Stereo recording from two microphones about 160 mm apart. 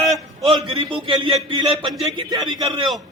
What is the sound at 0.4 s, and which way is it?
A man's voice, 35° right (ahead or behind).